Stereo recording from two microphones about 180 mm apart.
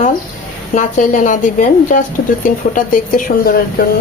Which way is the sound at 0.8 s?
45° left (ahead or behind).